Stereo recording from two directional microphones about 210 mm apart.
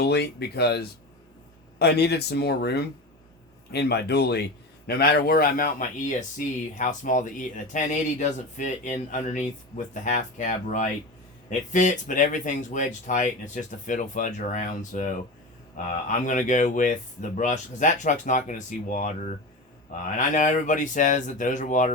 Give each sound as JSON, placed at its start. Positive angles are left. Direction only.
{"t": 0.0, "sound": "speech", "side_deg": 50}